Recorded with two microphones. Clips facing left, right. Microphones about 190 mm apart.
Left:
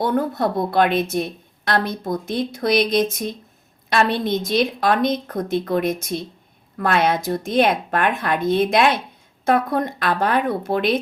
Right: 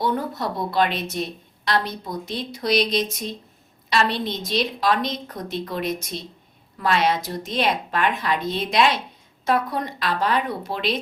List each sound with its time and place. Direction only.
0.0 s a woman's voice: 55° left (ahead or behind)